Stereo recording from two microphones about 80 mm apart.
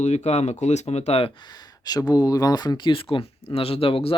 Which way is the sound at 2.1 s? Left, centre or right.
Left.